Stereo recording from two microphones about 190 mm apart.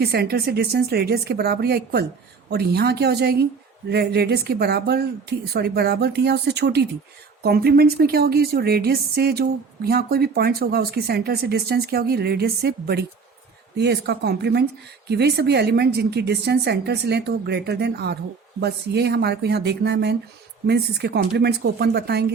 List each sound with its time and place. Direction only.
0.0 s a woman's voice: 55° right (ahead or behind)